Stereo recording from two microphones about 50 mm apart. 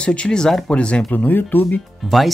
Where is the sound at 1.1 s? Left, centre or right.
Left.